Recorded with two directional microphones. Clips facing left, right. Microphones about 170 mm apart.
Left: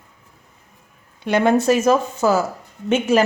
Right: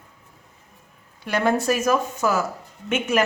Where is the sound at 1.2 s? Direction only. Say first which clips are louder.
Left 5 dB; 20° left (ahead or behind).